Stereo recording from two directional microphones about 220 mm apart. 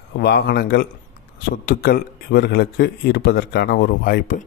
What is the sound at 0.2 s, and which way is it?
Speech, 45° left (ahead or behind).